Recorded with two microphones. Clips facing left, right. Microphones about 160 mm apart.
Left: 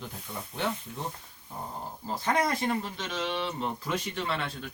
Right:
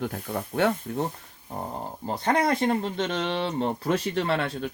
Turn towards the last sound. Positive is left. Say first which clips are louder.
# right 7 dB
turn(degrees=-65)  # may be behind; listen again after turning